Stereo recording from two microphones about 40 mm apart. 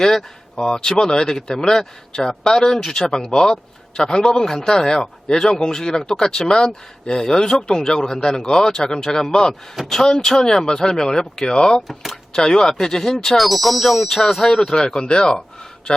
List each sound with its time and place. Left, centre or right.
0.0 s a man's voice: centre
11.9 s speech: centre
12.3 s a man's voice: centre